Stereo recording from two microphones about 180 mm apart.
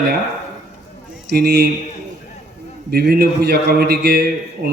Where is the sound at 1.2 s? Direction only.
65° right (ahead or behind).